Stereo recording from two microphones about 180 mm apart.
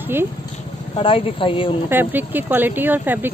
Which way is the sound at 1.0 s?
30° left (ahead or behind).